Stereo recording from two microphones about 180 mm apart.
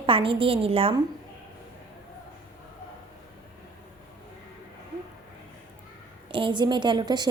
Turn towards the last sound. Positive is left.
turn(degrees=-25)  # may be behind; listen again after turning